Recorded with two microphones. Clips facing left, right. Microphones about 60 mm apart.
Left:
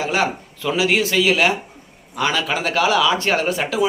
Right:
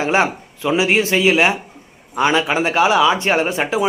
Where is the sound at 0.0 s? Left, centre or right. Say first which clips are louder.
Right 4 dB; right.